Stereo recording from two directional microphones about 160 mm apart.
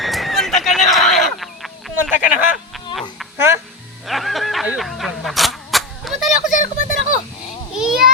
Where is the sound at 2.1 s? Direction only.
10° right (ahead or behind).